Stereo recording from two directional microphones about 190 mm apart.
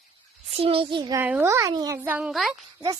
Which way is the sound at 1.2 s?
10° right (ahead or behind).